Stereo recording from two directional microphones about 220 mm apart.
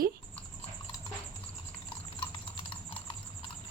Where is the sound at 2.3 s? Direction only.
25° left (ahead or behind).